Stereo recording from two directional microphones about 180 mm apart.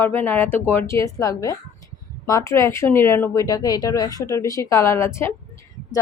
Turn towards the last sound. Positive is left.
turn(degrees=15)  # may be behind; listen again after turning